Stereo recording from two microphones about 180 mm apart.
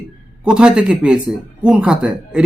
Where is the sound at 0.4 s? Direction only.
5° right (ahead or behind).